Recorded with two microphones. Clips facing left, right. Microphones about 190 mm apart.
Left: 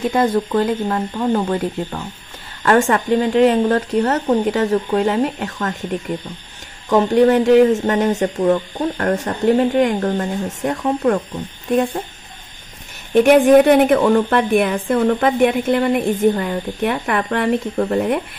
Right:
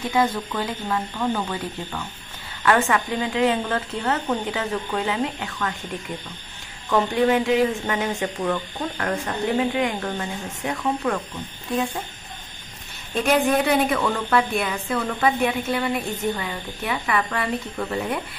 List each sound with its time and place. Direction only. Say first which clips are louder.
0.1 s a woman's voice: left 3 dB; 50° left (ahead or behind)
6.9 s a woman's voice: left 7 dB; 40° left (ahead or behind)
13.1 s a woman's voice: left 10 dB; 60° left (ahead or behind)
13.9 s a woman's voice: left 7 dB; 45° left (ahead or behind)